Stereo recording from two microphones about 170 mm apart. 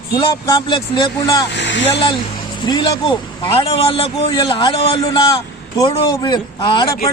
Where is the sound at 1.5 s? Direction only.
90° left.